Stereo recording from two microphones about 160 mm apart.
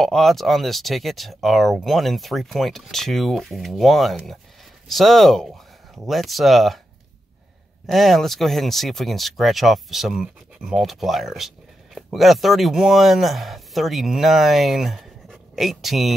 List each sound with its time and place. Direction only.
0.0 s speech: centre (ahead or behind)
7.8 s speech: centre (ahead or behind)